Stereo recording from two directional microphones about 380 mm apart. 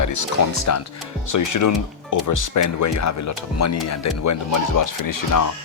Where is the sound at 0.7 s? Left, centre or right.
Left.